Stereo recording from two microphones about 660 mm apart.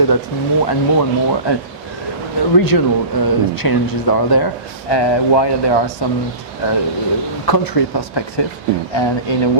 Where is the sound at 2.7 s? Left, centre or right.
Left.